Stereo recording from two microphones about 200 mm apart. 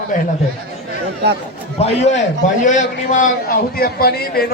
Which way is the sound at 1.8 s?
35° left (ahead or behind).